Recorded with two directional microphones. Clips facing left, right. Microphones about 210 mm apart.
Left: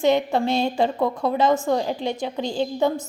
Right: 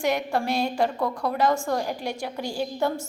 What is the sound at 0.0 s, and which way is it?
A woman's voice, 25° left (ahead or behind).